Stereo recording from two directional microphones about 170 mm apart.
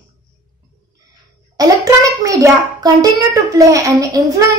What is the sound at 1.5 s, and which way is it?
Child singing, 20° right (ahead or behind).